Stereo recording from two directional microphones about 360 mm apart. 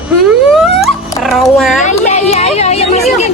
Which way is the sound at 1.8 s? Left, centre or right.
Centre.